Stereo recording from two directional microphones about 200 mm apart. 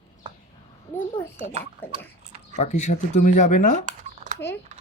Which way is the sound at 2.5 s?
35° left (ahead or behind).